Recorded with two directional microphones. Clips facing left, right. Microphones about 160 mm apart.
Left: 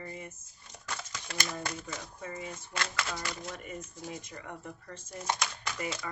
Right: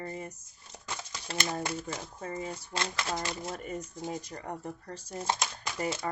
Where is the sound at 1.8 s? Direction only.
35° right (ahead or behind).